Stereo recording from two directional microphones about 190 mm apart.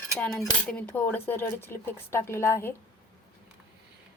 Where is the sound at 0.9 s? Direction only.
10° left (ahead or behind).